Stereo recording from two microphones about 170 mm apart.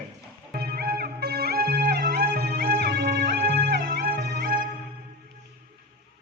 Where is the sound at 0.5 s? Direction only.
65° right (ahead or behind); by 3.3 s 85° right.